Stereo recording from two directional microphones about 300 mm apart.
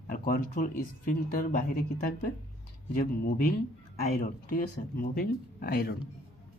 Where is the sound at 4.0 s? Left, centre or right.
Left.